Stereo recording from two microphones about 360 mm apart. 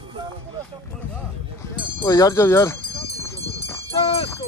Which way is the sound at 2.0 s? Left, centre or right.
Centre.